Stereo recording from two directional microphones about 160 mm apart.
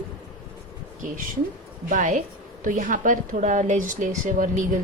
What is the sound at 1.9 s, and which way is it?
Speech, 55° right (ahead or behind).